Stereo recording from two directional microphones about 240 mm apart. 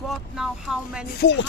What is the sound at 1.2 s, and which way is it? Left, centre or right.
Chopping, left.